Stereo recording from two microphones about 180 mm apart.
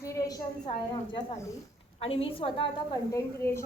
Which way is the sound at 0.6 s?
35° left (ahead or behind).